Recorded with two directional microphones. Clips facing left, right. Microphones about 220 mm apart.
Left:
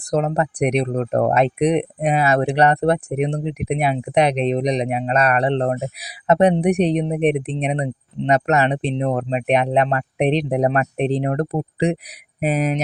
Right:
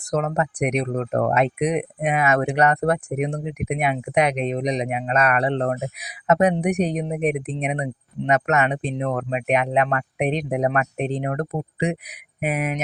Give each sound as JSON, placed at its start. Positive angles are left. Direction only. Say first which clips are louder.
{"t": 0.1, "sound": "speech", "louder": "left 3 dB", "side_deg": 30}